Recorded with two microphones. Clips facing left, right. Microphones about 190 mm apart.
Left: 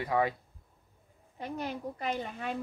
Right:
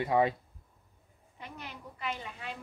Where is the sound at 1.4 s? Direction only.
40° left (ahead or behind).